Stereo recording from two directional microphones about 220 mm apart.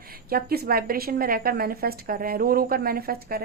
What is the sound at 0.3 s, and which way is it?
A woman's voice, 45° right (ahead or behind).